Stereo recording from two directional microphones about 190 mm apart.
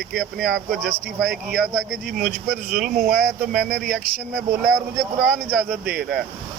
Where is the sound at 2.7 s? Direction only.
45° right (ahead or behind).